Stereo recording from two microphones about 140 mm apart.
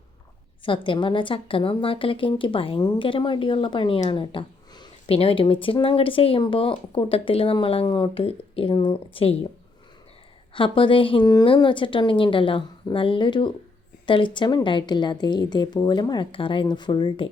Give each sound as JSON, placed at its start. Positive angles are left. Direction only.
{"t": 0.6, "sound": "speech", "side_deg": 35}
{"t": 4.1, "sound": "a sound", "side_deg": 40}
{"t": 5.0, "sound": "speech", "side_deg": 45}
{"t": 10.5, "sound": "speech", "side_deg": 40}